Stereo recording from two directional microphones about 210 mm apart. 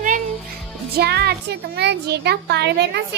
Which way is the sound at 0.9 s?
50° right (ahead or behind).